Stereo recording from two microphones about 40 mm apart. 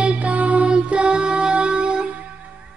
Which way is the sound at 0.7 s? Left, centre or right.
Right.